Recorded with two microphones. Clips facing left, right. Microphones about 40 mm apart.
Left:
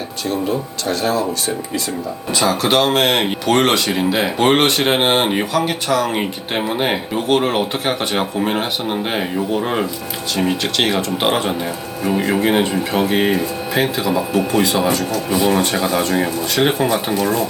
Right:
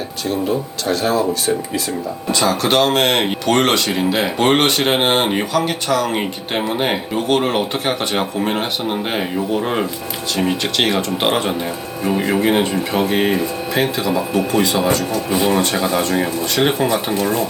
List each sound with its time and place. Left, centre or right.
0.3 s speech: centre
15.1 s speech: centre
15.4 s speech: centre